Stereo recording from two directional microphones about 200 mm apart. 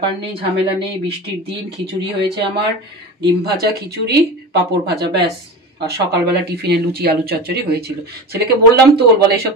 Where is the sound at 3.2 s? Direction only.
55° right (ahead or behind).